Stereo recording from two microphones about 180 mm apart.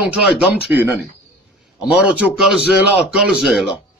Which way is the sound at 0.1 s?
5° right (ahead or behind).